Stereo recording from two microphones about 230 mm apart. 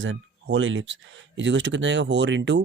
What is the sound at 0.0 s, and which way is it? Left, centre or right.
Speech, right.